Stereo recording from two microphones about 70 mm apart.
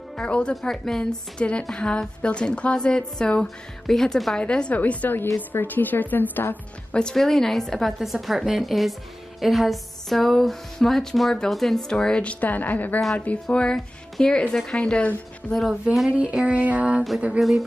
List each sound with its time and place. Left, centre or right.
0.2 s a woman's voice: centre
6.5 s a woman's voice: centre
15.7 s speech: centre
16.1 s music: centre
17.4 s speech: centre